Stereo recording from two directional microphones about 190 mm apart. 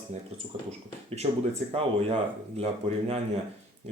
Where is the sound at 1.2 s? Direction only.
30° right (ahead or behind).